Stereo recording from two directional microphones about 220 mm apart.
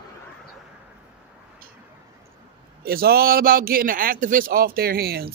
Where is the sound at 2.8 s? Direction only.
45° right (ahead or behind).